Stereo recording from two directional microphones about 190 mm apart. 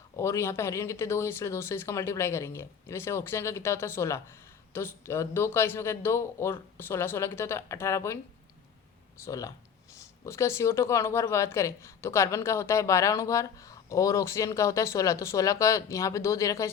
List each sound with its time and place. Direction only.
0.2 s speech: 15° left (ahead or behind)